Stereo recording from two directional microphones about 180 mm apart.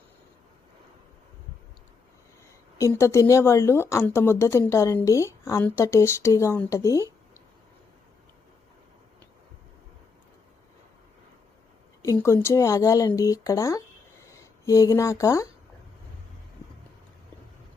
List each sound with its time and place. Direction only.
2.7 s speech: 15° left (ahead or behind)
12.1 s speech: 15° left (ahead or behind)